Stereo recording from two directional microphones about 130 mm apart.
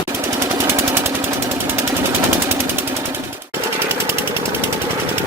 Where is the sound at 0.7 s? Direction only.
20° right (ahead or behind).